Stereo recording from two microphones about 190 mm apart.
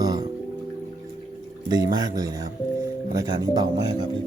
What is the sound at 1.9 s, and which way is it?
Speech, 20° right (ahead or behind).